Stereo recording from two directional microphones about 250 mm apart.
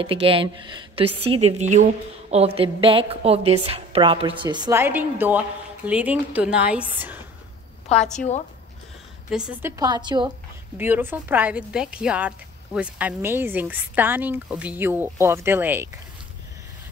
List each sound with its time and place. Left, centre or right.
0.0 s a woman's voice: right
7.9 s a woman's voice: left
9.3 s a woman's voice: centre